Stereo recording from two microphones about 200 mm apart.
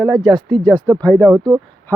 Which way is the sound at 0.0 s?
Centre (ahead or behind).